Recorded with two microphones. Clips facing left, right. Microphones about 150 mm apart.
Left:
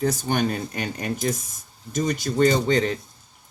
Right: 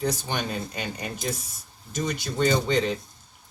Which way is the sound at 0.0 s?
45° left (ahead or behind).